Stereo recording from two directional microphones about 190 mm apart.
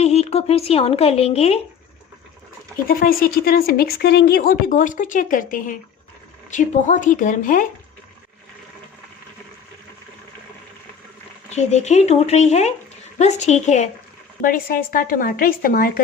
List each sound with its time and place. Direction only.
0.0 s speech: 35° left (ahead or behind)
2.8 s speech: 50° left (ahead or behind)
11.5 s speech: 35° left (ahead or behind)
14.4 s speech: 50° left (ahead or behind)